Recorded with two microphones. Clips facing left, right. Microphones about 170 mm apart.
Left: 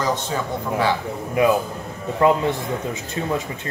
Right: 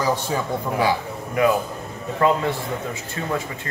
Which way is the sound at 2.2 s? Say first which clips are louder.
Left 2 dB; 15° left (ahead or behind).